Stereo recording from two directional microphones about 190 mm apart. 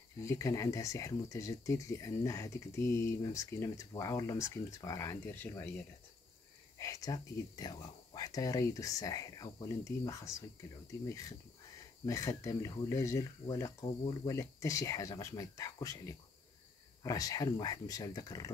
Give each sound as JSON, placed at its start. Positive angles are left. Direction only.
{"t": 0.2, "sound": "speech", "side_deg": 15}